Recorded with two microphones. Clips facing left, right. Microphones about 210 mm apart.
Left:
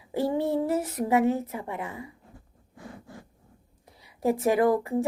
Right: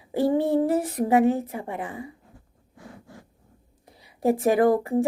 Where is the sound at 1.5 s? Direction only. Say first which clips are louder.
Right 2 dB; 30° right (ahead or behind).